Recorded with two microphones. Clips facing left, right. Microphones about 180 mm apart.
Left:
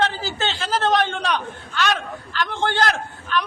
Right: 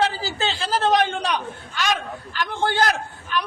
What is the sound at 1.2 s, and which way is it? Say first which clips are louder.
A man's voice: left 1 dB; 10° right (ahead or behind).